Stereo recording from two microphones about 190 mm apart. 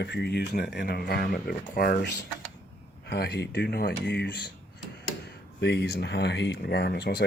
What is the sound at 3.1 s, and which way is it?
Speech, 60° left (ahead or behind).